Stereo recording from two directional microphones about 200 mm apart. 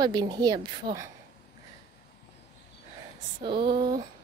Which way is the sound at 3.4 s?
25° right (ahead or behind).